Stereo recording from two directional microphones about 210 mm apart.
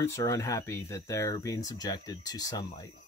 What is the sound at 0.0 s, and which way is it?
Speech, 15° left (ahead or behind).